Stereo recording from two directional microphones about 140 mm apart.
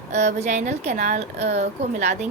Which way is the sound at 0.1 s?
55° right (ahead or behind).